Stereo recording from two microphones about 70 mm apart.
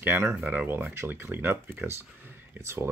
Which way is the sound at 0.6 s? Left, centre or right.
Right.